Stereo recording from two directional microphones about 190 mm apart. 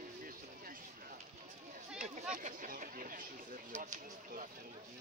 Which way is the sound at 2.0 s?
40° right (ahead or behind).